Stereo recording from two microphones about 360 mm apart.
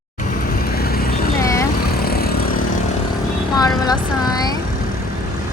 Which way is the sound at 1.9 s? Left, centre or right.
Left.